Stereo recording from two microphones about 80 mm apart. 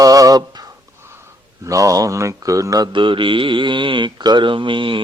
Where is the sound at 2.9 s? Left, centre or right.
Right.